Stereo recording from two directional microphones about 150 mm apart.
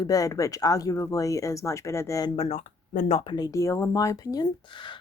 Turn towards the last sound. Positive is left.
turn(degrees=30)  # may be behind; listen again after turning